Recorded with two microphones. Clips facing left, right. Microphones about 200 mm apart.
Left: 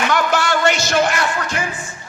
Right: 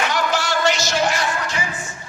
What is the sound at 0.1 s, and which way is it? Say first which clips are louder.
Music: left 4 dB; 55° left (ahead or behind).